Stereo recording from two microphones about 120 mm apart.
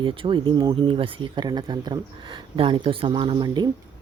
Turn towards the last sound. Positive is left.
turn(degrees=-35)  # may be behind; listen again after turning